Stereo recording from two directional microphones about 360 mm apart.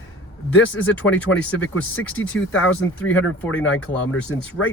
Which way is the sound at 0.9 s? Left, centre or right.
Centre.